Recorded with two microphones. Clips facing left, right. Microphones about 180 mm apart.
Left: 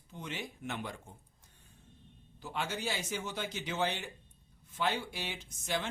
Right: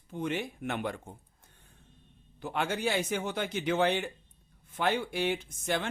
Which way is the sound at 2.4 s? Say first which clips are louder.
Right 6 dB; 60° right (ahead or behind).